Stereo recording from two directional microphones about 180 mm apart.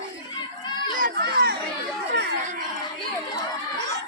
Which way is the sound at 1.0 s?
60° right (ahead or behind).